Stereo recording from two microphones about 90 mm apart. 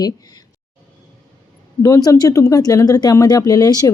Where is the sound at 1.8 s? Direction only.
40° left (ahead or behind).